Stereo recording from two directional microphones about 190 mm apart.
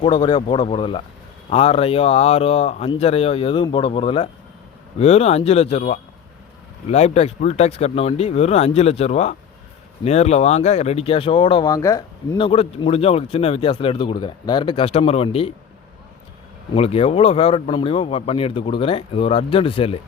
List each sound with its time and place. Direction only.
0.0 s speech: 25° left (ahead or behind)
12.4 s speech: 30° left (ahead or behind)
16.7 s speech: 30° left (ahead or behind)